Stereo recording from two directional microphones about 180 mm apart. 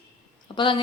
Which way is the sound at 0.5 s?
25° left (ahead or behind).